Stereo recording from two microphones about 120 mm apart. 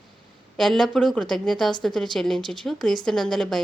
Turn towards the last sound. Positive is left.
turn(degrees=5)  # may be behind; listen again after turning